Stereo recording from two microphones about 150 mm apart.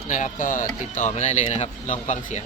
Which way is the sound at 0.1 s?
65° left (ahead or behind).